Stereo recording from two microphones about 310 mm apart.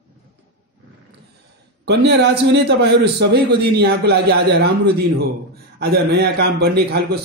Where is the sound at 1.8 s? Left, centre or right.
Right.